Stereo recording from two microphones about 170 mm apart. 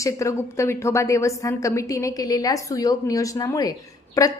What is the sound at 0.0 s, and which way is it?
A woman's voice, 15° left (ahead or behind).